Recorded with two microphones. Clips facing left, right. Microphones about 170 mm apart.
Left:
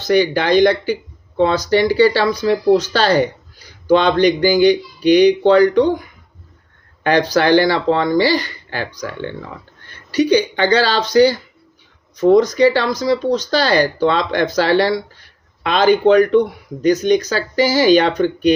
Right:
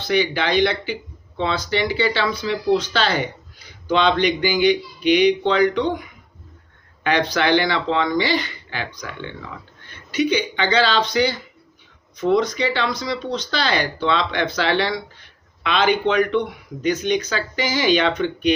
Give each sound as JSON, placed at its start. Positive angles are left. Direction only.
{"t": 0.0, "sound": "speech", "side_deg": 40}